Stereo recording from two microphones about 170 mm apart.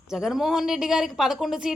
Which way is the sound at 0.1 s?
5° right (ahead or behind).